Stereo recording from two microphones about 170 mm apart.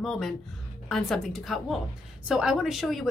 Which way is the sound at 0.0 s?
Centre (ahead or behind).